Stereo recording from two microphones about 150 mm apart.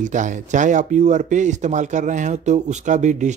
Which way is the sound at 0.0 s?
55° right (ahead or behind).